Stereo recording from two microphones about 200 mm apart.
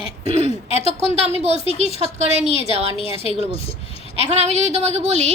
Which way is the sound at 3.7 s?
30° left (ahead or behind).